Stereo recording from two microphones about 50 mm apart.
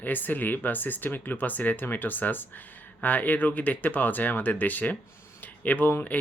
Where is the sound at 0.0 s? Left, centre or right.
Left.